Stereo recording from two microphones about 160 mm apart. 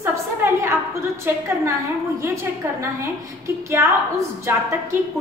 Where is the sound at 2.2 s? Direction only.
20° right (ahead or behind).